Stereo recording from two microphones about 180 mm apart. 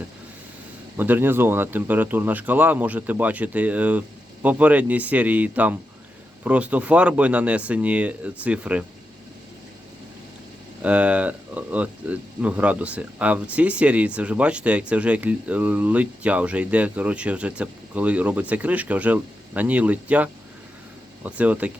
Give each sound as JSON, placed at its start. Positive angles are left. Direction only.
{"t": 0.9, "sound": "speech", "side_deg": -10}
{"t": 10.8, "sound": "speech", "side_deg": -5}